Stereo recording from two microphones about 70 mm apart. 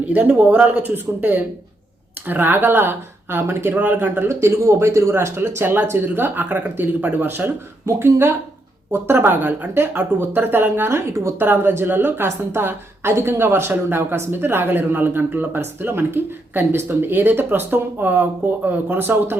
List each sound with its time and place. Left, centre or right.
0.1 s speech: right
4.3 s speech: right